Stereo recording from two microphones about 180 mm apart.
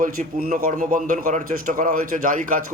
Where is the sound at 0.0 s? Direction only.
50° right (ahead or behind).